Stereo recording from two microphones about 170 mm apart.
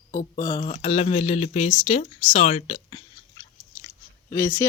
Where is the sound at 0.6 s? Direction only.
35° left (ahead or behind).